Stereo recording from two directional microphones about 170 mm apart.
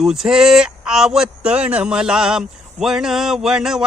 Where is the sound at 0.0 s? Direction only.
Centre (ahead or behind).